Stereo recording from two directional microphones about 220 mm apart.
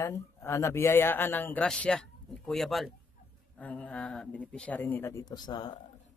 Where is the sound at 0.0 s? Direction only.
10° left (ahead or behind).